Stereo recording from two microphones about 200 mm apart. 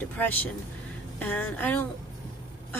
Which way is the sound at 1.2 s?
10° left (ahead or behind).